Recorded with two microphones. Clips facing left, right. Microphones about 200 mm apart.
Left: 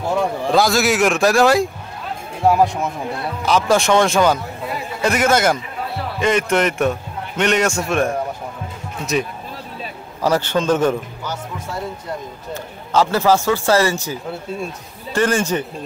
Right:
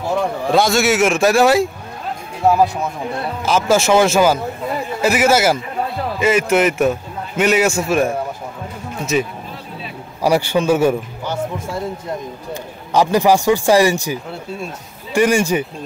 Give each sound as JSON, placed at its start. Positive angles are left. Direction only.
{"t": 0.1, "sound": "a man's voice", "side_deg": 0}
{"t": 10.2, "sound": "a man's voice", "side_deg": -10}
{"t": 11.2, "sound": "speech", "side_deg": -25}
{"t": 12.9, "sound": "a man's voice", "side_deg": -15}